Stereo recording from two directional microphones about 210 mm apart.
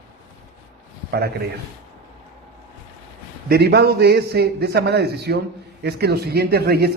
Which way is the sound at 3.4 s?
50° right (ahead or behind).